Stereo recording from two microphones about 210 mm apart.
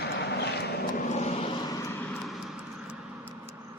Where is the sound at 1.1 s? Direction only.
35° left (ahead or behind).